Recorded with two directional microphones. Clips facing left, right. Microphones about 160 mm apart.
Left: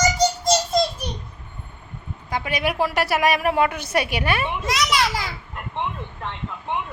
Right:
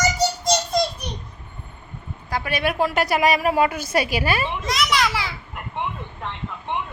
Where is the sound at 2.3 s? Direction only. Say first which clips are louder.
Right 1 dB; 15° left (ahead or behind).